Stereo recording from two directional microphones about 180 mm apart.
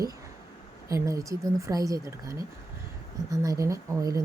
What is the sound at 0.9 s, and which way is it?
Speech, 15° right (ahead or behind).